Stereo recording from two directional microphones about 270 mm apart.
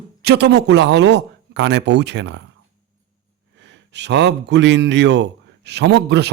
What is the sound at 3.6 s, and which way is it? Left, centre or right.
Speech, right.